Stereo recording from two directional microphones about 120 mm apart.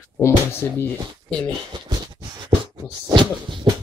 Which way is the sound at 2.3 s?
35° right (ahead or behind).